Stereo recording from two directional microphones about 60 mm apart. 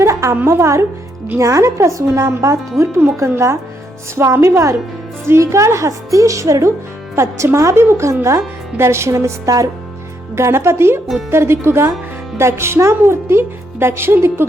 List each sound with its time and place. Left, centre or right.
0.0 s a sound: right
0.4 s a woman's voice: right
3.2 s a woman's voice: right
4.1 s a woman's voice: right